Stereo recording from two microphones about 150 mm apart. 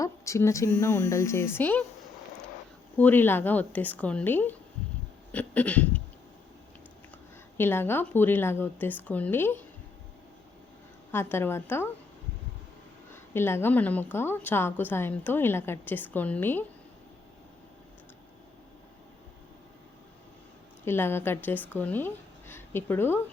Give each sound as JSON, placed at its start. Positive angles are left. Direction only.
{"t": 0.0, "sound": "speech", "side_deg": 20}
{"t": 3.0, "sound": "a woman's voice", "side_deg": 10}
{"t": 7.6, "sound": "a woman's voice", "side_deg": 15}
{"t": 11.1, "sound": "a woman's voice", "side_deg": 15}
{"t": 13.3, "sound": "a woman's voice", "side_deg": 15}
{"t": 20.8, "sound": "speech", "side_deg": 15}